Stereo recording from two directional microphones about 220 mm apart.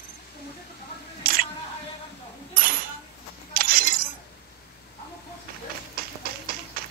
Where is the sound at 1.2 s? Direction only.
40° right (ahead or behind).